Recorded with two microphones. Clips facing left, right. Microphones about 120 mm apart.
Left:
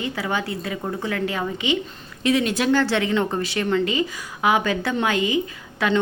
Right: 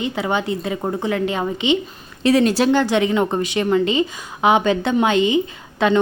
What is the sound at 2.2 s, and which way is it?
Speech, 40° right (ahead or behind).